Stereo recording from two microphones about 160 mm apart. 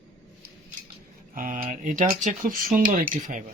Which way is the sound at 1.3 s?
60° right (ahead or behind).